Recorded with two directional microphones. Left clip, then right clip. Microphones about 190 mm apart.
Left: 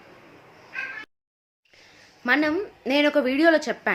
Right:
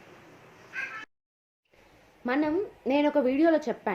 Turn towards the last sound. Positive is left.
turn(degrees=15)  # may be behind; listen again after turning